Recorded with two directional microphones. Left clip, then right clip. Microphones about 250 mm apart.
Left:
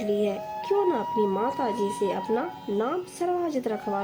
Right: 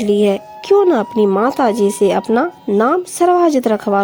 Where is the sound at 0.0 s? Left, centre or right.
Right.